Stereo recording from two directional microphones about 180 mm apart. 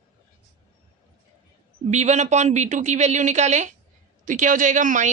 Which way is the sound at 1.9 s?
40° right (ahead or behind).